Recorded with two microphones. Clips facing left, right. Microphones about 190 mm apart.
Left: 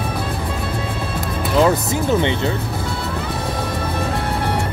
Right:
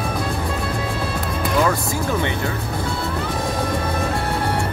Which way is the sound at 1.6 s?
20° left (ahead or behind).